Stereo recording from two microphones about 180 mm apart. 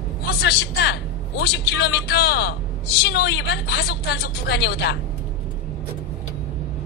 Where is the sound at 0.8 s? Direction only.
70° left (ahead or behind).